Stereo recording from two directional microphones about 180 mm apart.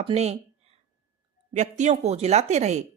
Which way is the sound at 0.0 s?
35° right (ahead or behind).